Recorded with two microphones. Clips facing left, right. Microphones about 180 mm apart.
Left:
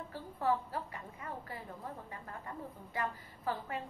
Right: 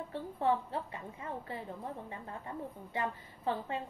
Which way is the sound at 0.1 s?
25° right (ahead or behind).